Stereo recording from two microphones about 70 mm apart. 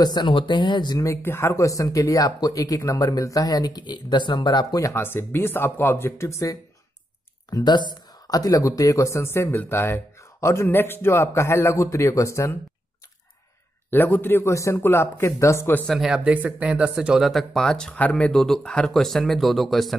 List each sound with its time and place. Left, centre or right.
0.0 s speech: left
0.9 s speech: left
1.2 s speech: left
1.5 s speech: left
5.0 s speech: left
7.4 s speech: left
13.8 s speech: left
14.5 s speech: left
14.8 s speech: left
15.9 s speech: centre
16.3 s speech: right
17.3 s speech: centre